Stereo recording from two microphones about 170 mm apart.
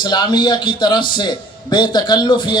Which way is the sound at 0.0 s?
25° left (ahead or behind).